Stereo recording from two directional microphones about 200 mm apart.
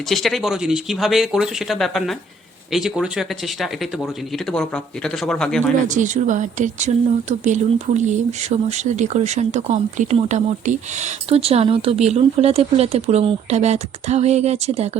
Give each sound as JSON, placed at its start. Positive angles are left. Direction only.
{"t": 0.1, "sound": "speech", "side_deg": 0}
{"t": 5.9, "sound": "speech", "side_deg": -40}